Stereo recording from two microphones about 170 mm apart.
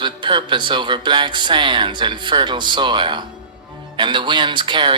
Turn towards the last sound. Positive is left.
turn(degrees=-25)  # may be behind; listen again after turning